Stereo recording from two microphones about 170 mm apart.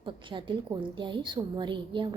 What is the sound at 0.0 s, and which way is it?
A woman's voice, 30° right (ahead or behind).